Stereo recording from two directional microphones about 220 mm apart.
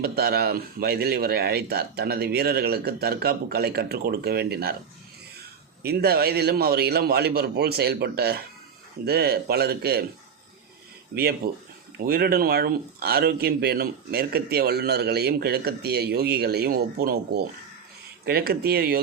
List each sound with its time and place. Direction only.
0.0 s speech: 45° right (ahead or behind)
5.8 s speech: 45° right (ahead or behind)
11.1 s speech: 45° right (ahead or behind)